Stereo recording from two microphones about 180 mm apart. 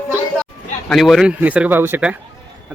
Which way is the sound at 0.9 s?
Centre (ahead or behind).